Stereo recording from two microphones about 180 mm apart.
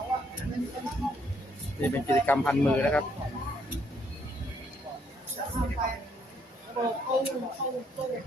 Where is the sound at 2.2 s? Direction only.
5° left (ahead or behind).